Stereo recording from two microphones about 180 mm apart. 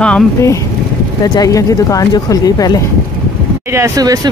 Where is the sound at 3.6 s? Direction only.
15° right (ahead or behind).